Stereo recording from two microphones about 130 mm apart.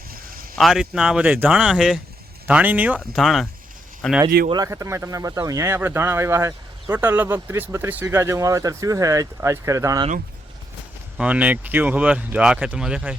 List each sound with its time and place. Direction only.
0.5 s speech: centre (ahead or behind)
3.2 s speech: centre (ahead or behind)
4.5 s speech: 25° right (ahead or behind)
11.2 s speech: 10° right (ahead or behind)